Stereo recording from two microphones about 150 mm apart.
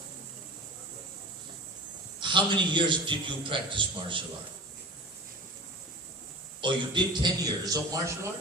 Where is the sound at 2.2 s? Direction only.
30° right (ahead or behind).